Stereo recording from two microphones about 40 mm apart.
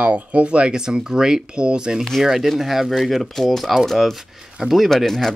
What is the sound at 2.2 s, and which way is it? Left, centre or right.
Speech, centre.